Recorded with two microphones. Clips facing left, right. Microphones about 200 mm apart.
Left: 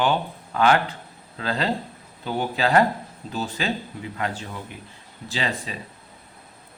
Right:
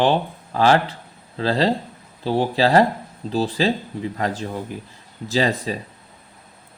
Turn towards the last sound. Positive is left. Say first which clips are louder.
# right 8 dB
turn(degrees=-40)  # may be behind; listen again after turning